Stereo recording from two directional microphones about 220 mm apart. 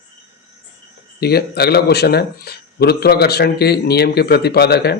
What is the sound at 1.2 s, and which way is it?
Speech, 45° left (ahead or behind).